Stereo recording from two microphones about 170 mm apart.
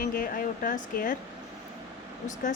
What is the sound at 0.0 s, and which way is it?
Speech, 55° left (ahead or behind).